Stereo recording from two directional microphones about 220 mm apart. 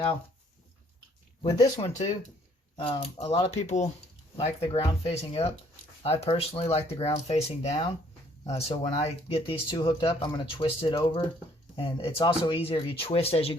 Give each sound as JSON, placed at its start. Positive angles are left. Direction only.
{"t": 1.5, "sound": "speech", "side_deg": 30}